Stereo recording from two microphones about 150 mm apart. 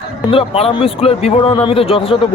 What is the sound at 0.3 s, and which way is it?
Speech, 40° left (ahead or behind).